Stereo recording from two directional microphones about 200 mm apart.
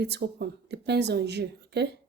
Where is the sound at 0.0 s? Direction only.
55° right (ahead or behind).